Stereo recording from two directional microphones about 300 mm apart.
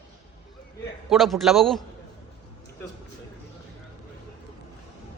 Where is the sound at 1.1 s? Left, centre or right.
Centre.